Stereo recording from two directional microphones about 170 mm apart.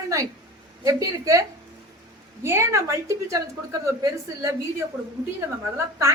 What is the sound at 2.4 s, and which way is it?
A woman's voice, 15° right (ahead or behind).